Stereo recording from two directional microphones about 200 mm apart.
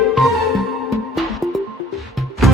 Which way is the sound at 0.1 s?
Centre (ahead or behind).